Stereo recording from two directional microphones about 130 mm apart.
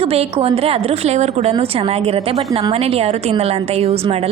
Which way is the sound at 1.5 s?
45° right (ahead or behind).